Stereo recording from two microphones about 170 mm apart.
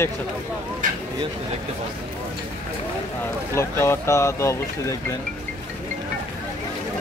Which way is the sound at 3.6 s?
15° left (ahead or behind).